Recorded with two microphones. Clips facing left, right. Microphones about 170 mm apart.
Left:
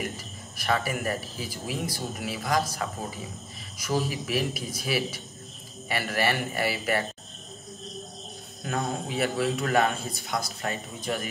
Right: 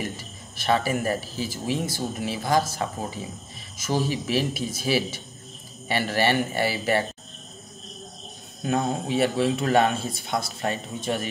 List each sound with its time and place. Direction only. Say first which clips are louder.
0.6 s a man's voice: right 4 dB; 30° right (ahead or behind)
8.6 s a man's voice: right 5 dB; 25° right (ahead or behind)